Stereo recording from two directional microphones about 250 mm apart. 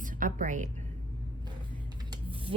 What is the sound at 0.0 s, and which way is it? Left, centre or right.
Speech, right.